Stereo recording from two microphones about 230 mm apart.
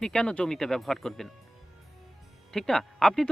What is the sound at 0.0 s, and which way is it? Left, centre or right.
A man's voice, centre.